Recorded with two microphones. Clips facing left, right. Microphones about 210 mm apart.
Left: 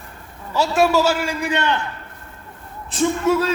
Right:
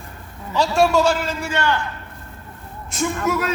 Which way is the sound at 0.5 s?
5° left (ahead or behind).